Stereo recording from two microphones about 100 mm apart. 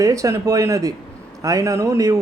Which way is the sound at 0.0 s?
35° right (ahead or behind).